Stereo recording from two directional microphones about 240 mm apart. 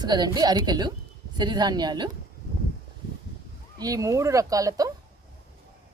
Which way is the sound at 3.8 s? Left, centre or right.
Centre.